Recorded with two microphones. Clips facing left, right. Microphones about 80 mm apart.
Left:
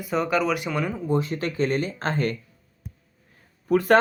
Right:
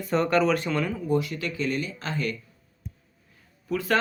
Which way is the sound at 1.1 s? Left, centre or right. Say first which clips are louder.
Left 2 dB; left.